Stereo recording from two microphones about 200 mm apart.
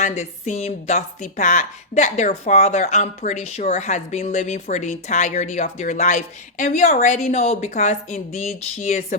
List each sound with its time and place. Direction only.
0.0 s a woman's voice: 35° left (ahead or behind)